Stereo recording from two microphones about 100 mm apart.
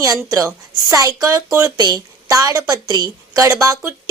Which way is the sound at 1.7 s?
40° right (ahead or behind).